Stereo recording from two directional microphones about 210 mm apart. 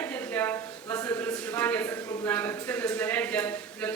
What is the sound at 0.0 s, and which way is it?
Speech, 10° left (ahead or behind).